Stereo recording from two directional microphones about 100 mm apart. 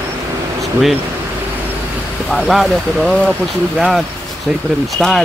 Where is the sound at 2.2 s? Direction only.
Centre (ahead or behind).